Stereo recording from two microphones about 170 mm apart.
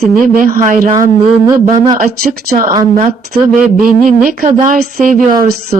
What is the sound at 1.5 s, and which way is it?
Speech, 25° right (ahead or behind).